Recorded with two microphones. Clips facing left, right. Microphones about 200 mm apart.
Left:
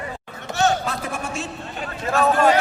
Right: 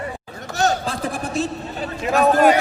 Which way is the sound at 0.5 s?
35° right (ahead or behind).